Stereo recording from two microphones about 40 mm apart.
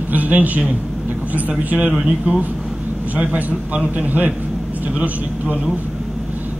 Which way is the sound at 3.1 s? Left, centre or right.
Right.